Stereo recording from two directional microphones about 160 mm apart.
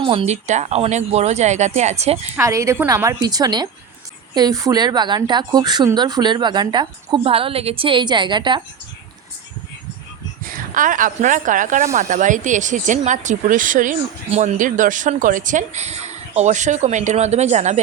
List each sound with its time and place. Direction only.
0.0 s speech: 35° right (ahead or behind)
2.3 s speech: 20° right (ahead or behind)
10.4 s speech: 60° right (ahead or behind)